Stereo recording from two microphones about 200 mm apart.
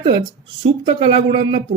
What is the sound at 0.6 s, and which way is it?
Speech, 30° right (ahead or behind).